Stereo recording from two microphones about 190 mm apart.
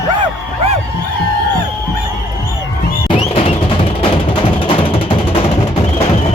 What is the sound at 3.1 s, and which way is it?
Music, 30° left (ahead or behind).